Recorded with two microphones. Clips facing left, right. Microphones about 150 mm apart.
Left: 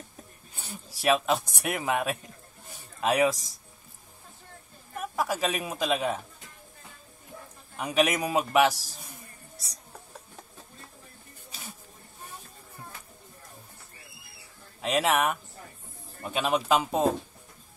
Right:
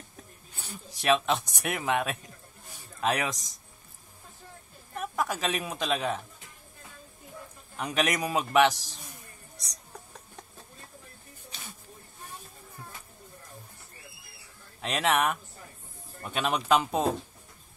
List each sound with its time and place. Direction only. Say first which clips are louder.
1.0 s a man's voice: left 1 dB; 5° left (ahead or behind)
4.9 s a woman's voice: left 1 dB; 5° left (ahead or behind)
7.7 s a man's voice: left 3 dB; 5° left (ahead or behind)
14.8 s a man's voice: left 2 dB; 5° left (ahead or behind)